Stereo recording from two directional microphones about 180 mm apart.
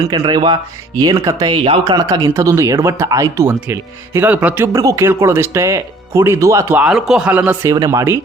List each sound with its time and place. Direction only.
0.0 s speech: 20° right (ahead or behind)
7.7 s speech: 20° right (ahead or behind)